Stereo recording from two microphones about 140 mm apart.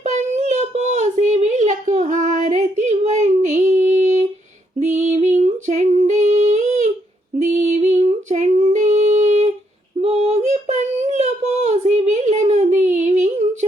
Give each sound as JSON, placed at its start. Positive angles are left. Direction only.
{"t": 0.0, "sound": "a sound", "side_deg": -55}
{"t": 4.8, "sound": "female singing", "side_deg": -60}
{"t": 10.0, "sound": "child singing", "side_deg": -50}